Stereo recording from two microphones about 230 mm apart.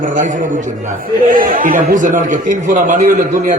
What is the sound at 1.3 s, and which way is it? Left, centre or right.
A man's voice, right.